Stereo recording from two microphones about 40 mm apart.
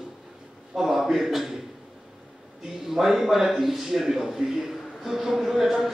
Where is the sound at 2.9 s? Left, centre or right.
Centre.